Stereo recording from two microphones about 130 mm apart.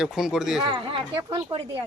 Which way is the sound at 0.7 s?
40° right (ahead or behind).